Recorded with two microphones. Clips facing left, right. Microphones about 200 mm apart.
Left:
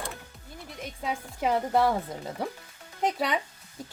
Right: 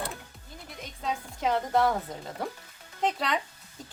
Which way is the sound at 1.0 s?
10° left (ahead or behind).